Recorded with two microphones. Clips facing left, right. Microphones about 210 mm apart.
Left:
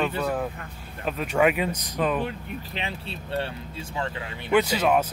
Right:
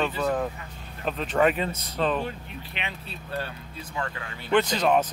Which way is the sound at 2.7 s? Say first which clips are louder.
Left 1 dB; 30° left (ahead or behind).